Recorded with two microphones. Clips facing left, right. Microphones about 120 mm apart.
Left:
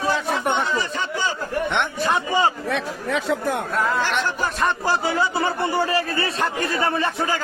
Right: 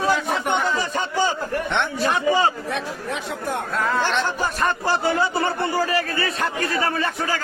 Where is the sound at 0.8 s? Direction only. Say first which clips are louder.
Right 3 dB; 40° right (ahead or behind).